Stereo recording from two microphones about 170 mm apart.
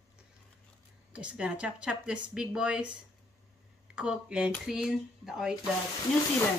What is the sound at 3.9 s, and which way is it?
Speech, 5° right (ahead or behind).